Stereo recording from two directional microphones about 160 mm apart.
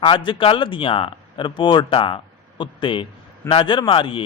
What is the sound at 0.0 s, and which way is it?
A man's voice, 30° left (ahead or behind).